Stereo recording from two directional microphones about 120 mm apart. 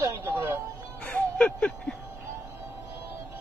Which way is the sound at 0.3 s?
20° right (ahead or behind).